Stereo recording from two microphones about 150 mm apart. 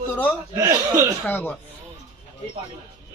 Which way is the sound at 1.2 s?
15° left (ahead or behind).